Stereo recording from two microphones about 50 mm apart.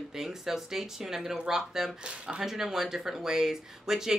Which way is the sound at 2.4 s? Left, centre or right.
Centre.